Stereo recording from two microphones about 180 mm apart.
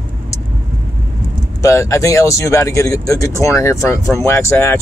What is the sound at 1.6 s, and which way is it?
Speech, 15° left (ahead or behind).